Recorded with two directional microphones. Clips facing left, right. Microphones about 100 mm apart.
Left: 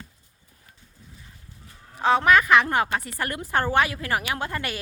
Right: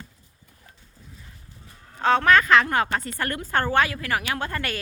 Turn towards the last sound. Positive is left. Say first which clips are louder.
# right 1 dB
turn(degrees=15)  # may be behind; listen again after turning